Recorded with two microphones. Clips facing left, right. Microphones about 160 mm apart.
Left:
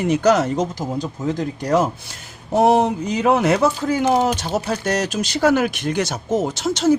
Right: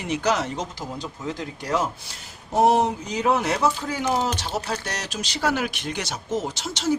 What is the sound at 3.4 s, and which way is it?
Speech, 55° left (ahead or behind).